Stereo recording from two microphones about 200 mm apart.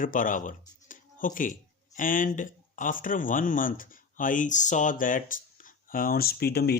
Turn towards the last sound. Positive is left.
turn(degrees=50)  # may be behind; listen again after turning